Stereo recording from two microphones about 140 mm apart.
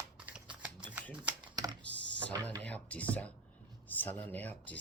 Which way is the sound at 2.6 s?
10° left (ahead or behind).